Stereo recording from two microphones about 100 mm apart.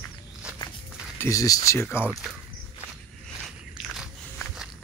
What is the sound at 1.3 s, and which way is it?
Speech, 35° left (ahead or behind).